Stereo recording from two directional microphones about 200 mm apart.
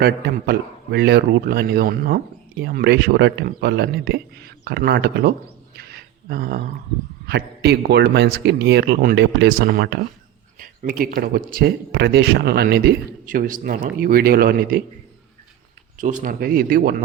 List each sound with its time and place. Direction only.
0.0 s a man's voice: 55° right (ahead or behind)
5.7 s a sound: 50° right (ahead or behind)
7.3 s a man's voice: 55° right (ahead or behind)
16.0 s a man's voice: 40° right (ahead or behind)